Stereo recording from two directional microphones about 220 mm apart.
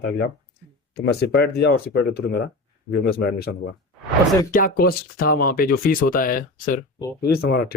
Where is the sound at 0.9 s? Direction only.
50° left (ahead or behind).